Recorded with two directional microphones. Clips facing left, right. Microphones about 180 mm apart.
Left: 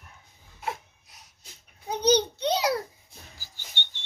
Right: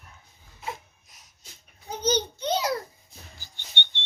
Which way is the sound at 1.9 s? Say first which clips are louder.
Left 4 dB; 65° left (ahead or behind).